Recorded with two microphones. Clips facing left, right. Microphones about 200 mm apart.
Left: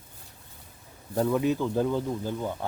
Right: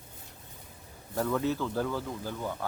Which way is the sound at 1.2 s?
20° left (ahead or behind).